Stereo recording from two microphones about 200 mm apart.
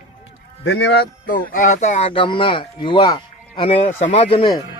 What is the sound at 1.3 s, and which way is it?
Speech, 40° left (ahead or behind).